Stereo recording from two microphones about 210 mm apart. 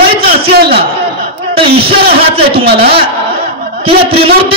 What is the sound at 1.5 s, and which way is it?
Speech, 25° right (ahead or behind).